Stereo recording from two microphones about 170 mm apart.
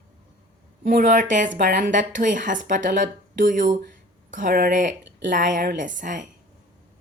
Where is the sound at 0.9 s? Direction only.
50° right (ahead or behind).